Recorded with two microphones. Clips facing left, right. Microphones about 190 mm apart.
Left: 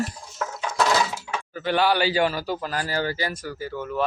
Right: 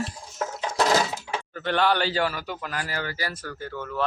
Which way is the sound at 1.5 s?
5° left (ahead or behind).